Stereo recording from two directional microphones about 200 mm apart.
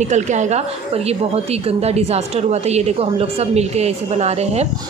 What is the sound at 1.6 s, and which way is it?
A woman's voice, 30° right (ahead or behind).